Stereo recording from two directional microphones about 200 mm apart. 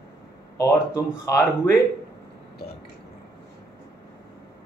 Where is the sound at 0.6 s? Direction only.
15° left (ahead or behind).